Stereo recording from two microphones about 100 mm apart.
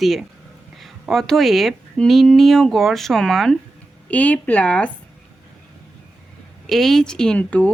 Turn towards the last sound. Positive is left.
turn(degrees=15)  # may be behind; listen again after turning